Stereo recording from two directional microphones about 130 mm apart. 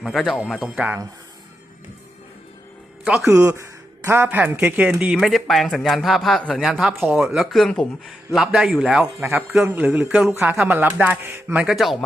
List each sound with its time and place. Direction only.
0.0 s a man's voice: centre (ahead or behind)
3.0 s speech: 5° right (ahead or behind)
3.2 s a man's voice: 20° right (ahead or behind)
6.9 s speech: 15° right (ahead or behind)
7.2 s a man's voice: 5° right (ahead or behind)
11.6 s a man's voice: centre (ahead or behind)